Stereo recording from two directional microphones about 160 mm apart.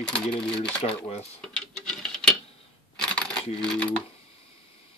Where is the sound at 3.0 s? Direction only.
5° left (ahead or behind).